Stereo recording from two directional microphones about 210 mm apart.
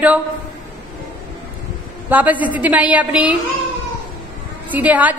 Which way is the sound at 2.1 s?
5° right (ahead or behind).